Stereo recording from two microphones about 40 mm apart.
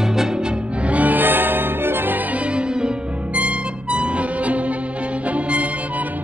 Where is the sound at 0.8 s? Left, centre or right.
Right.